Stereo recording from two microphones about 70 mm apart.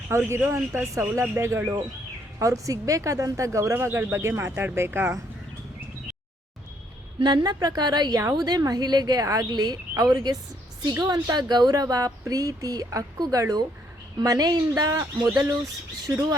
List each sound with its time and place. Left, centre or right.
0.1 s speech: right
2.4 s speech: right
3.8 s speech: right
7.2 s a woman's voice: right
10.1 s a woman's voice: right
15.4 s speech: right